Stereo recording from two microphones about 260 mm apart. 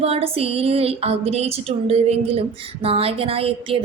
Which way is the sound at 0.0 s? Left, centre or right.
Right.